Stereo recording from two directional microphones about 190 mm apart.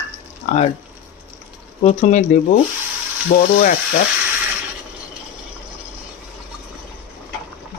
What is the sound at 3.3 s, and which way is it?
Speech, 50° left (ahead or behind).